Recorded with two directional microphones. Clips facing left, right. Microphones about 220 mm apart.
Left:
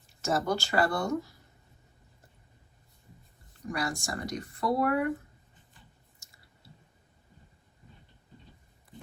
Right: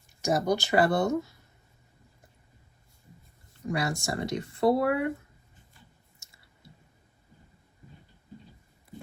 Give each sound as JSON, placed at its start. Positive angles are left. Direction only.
{"t": 0.2, "sound": "speech", "side_deg": -15}
{"t": 3.7, "sound": "speech", "side_deg": -25}
{"t": 6.1, "sound": "chewing", "side_deg": -25}